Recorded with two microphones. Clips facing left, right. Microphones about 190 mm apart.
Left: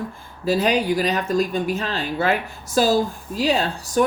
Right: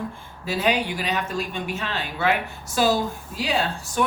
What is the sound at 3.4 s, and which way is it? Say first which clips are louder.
Speech: left 4 dB; 40° left (ahead or behind).